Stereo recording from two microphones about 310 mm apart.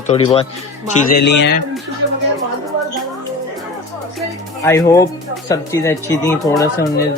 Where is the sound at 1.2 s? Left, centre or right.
Left.